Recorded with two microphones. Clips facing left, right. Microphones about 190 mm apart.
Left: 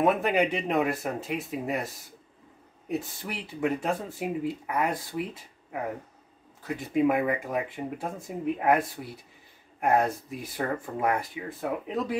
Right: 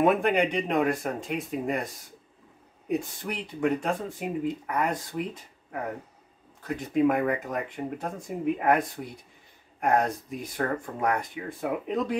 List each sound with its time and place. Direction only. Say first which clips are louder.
0.0 s speech: right 1 dB; centre (ahead or behind)
2.9 s speech: right 3 dB; 5° left (ahead or behind)